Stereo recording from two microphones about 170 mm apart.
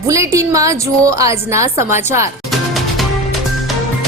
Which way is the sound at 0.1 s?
20° right (ahead or behind).